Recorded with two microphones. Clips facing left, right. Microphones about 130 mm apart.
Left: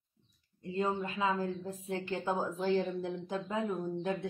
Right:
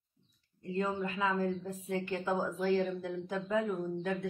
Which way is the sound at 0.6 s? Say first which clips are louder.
Left 1 dB; 20° left (ahead or behind).